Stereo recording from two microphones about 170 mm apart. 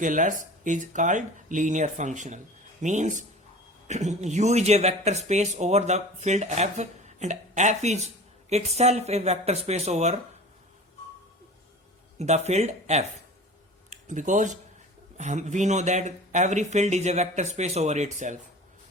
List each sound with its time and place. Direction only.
0.0 s speech: 50° right (ahead or behind)
12.5 s speech: 40° right (ahead or behind)
14.1 s speech: 50° right (ahead or behind)